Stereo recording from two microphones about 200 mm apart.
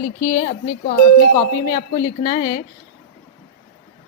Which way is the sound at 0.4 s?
40° left (ahead or behind).